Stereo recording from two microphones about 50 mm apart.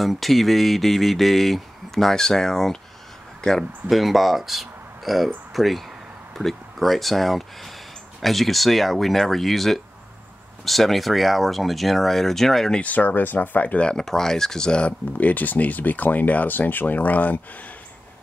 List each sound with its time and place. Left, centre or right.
0.0 s speech: centre
3.3 s a sound: centre
3.9 s speech: centre
12.8 s speech: left
13.7 s speech: centre
14.9 s speech: left